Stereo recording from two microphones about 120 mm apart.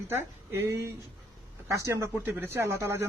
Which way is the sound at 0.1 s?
25° right (ahead or behind).